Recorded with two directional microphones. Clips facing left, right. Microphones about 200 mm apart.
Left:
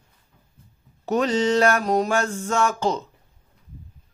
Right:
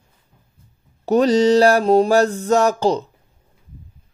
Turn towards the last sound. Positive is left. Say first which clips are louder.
# right 6 dB
turn(degrees=-35)  # may be behind; listen again after turning